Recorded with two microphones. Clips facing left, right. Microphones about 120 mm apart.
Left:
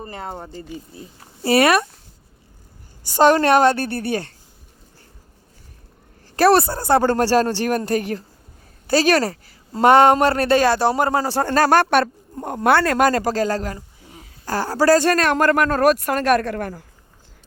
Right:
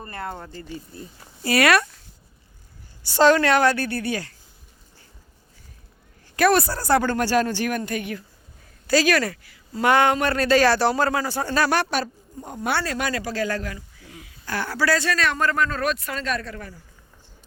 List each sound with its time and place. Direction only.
0.0 s a woman's voice: 20° left (ahead or behind)
3.3 s a woman's voice: 25° left (ahead or behind)
6.3 s a woman's voice: 30° left (ahead or behind)
11.2 s speech: 35° left (ahead or behind)
11.4 s speech: 45° left (ahead or behind)
15.5 s speech: 65° left (ahead or behind)
15.8 s speech: 55° left (ahead or behind)